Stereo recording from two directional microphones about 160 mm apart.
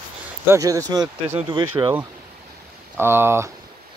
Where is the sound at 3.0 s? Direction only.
15° right (ahead or behind).